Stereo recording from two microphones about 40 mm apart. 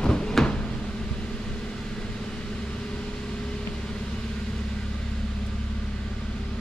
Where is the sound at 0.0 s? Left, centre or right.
Left.